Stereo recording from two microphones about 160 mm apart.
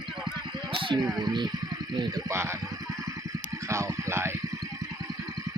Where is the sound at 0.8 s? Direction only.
30° right (ahead or behind).